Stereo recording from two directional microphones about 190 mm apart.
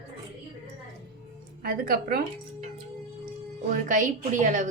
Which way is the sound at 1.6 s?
50° right (ahead or behind).